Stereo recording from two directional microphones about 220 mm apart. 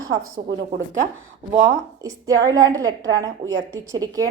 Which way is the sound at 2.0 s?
15° right (ahead or behind).